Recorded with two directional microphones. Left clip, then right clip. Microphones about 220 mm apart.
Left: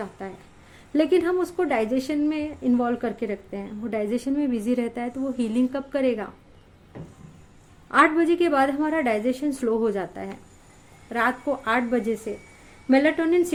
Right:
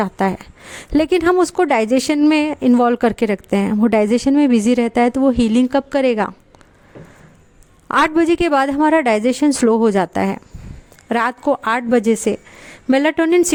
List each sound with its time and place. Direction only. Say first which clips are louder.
0.0 s speech: right 16 dB; 50° right (ahead or behind)
7.9 s speech: right 4 dB; 50° right (ahead or behind)